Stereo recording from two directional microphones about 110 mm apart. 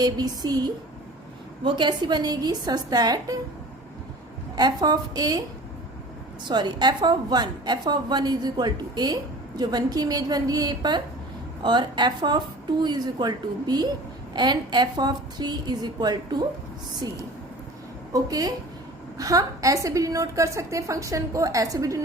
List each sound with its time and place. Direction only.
0.0 s a woman's voice: 35° right (ahead or behind)
4.5 s a woman's voice: 40° right (ahead or behind)
6.5 s a woman's voice: 40° right (ahead or behind)
18.1 s a woman's voice: 35° right (ahead or behind)